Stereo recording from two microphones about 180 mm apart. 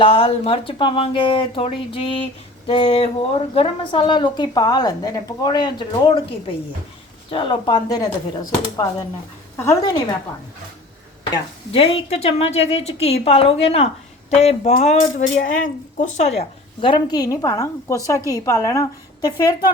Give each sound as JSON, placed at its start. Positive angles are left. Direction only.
{"t": 0.0, "sound": "a woman's voice", "side_deg": 30}
{"t": 7.3, "sound": "a woman's voice", "side_deg": 30}
{"t": 11.7, "sound": "a woman's voice", "side_deg": 30}